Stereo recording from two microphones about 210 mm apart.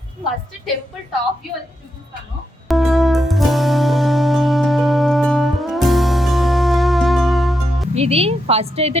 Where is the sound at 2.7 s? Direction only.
Centre (ahead or behind).